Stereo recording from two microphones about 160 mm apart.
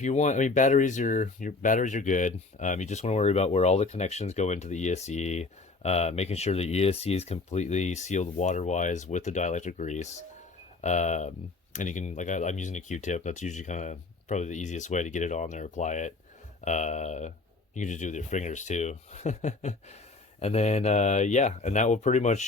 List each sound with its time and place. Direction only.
0.0 s speech: 50° left (ahead or behind)